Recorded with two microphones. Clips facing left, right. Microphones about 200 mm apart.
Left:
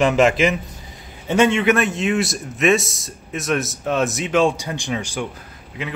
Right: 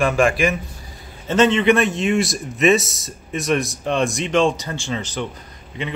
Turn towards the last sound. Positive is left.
turn(degrees=5)  # may be behind; listen again after turning